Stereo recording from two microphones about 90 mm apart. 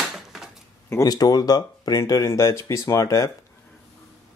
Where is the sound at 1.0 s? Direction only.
45° left (ahead or behind).